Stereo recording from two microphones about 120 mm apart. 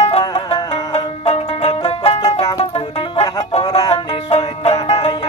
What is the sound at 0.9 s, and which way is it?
Music, 55° left (ahead or behind).